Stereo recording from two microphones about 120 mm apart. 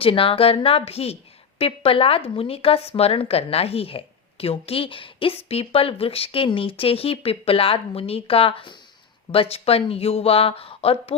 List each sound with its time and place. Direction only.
0.0 s speech: 50° left (ahead or behind)